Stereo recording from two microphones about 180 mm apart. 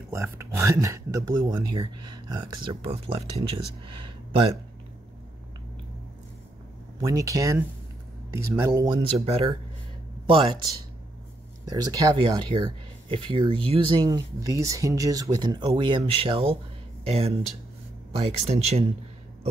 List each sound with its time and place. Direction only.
0.1 s speech: 15° right (ahead or behind)
7.0 s speech: 20° right (ahead or behind)
11.7 s speech: 20° right (ahead or behind); by 18.9 s 35° right (ahead or behind)